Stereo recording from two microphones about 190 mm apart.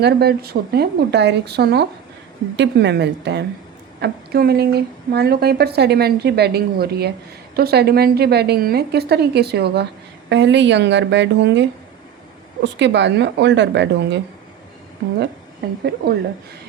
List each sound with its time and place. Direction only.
0.0 s a woman's voice: 60° right (ahead or behind)
12.6 s speech: 70° right (ahead or behind)
16.0 s a woman's voice: 55° right (ahead or behind)